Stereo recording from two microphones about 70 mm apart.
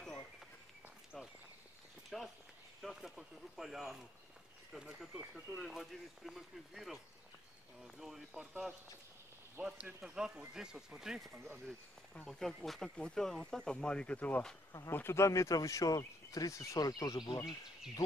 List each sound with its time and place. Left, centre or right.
1.1 s speech: centre
12.3 s speech: centre; by 14.4 s left
14.9 s speech: left